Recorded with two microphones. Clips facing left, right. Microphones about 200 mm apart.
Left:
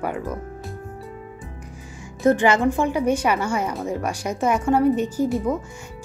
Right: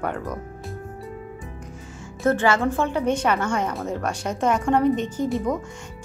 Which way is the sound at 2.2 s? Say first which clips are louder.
Left 3 dB; 15° left (ahead or behind).